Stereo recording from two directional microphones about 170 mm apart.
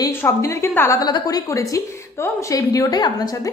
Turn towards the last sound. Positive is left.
turn(degrees=20)  # may be behind; listen again after turning